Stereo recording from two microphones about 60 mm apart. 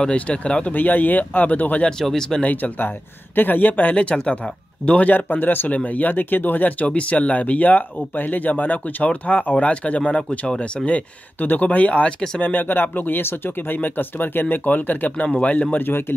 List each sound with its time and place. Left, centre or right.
0.0 s speech: centre
0.7 s speech: left
1.9 s speech: centre
2.4 s speech: left
15.8 s speech: left